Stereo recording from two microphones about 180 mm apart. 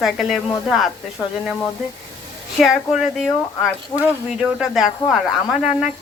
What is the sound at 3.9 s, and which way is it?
Speech, 25° left (ahead or behind).